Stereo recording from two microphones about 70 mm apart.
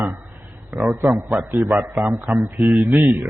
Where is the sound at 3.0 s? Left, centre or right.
Right.